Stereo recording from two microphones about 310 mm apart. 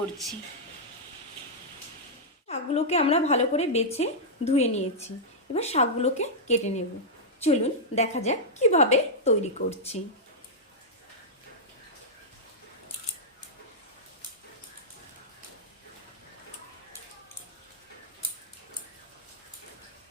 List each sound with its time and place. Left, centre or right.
2.5 s a woman's voice: centre